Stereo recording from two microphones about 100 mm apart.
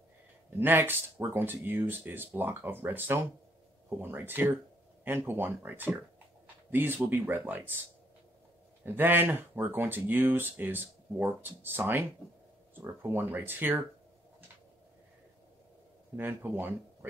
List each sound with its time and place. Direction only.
0.6 s speech: 20° right (ahead or behind)
8.8 s speech: 20° right (ahead or behind)
16.2 s speech: 20° right (ahead or behind)